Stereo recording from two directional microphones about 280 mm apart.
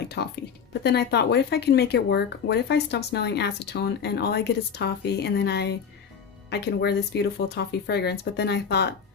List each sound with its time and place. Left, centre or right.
0.2 s speech: left